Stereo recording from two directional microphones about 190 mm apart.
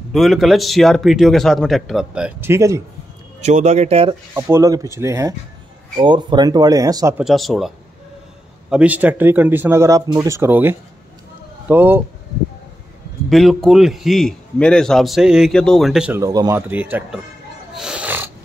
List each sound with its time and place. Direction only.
0.1 s a man's voice: centre (ahead or behind)
3.3 s speech: 35° right (ahead or behind)
4.3 s speech: 15° right (ahead or behind)
7.2 s a man's voice: centre (ahead or behind)
13.3 s a man's voice: centre (ahead or behind)
16.2 s speech: 20° right (ahead or behind)
17.7 s pig: 5° right (ahead or behind)